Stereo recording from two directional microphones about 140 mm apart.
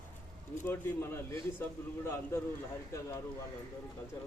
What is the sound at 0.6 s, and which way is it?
A man's voice, 15° left (ahead or behind).